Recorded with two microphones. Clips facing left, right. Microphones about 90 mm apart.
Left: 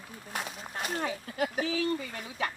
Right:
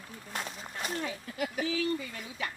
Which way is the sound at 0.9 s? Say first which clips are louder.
Left 5 dB; 45° left (ahead or behind).